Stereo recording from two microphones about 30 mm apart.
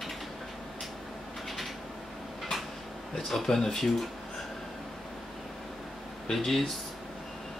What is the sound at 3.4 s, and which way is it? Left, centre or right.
Speech, centre.